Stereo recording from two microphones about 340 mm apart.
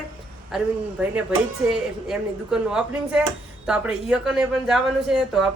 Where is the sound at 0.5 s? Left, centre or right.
Centre.